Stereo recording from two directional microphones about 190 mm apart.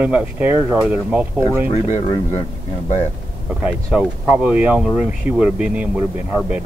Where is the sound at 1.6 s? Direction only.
35° left (ahead or behind).